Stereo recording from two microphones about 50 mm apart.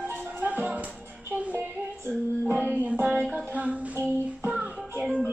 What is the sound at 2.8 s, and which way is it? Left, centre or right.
Music, right.